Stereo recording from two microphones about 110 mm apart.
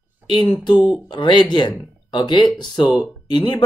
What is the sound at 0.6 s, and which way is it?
Speech, 40° left (ahead or behind).